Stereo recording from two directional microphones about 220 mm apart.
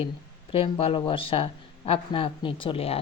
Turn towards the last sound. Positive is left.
turn(degrees=25)  # may be behind; listen again after turning